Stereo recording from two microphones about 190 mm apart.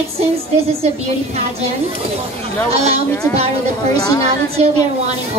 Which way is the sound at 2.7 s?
35° right (ahead or behind).